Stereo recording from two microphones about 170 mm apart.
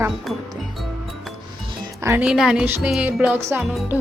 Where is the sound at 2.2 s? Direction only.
5° right (ahead or behind).